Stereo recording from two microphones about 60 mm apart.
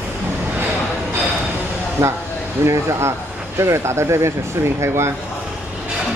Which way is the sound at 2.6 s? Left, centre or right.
Right.